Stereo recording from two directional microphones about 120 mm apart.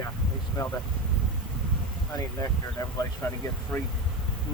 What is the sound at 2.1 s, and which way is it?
Speech, 30° left (ahead or behind).